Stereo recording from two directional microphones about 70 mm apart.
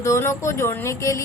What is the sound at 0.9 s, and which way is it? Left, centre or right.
Speech, left.